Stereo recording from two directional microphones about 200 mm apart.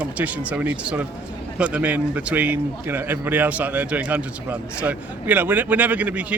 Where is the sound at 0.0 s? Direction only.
5° right (ahead or behind).